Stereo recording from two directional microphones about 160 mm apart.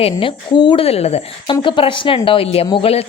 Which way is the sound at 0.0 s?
35° left (ahead or behind).